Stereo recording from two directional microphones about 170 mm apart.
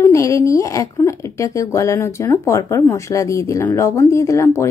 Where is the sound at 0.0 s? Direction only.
15° left (ahead or behind).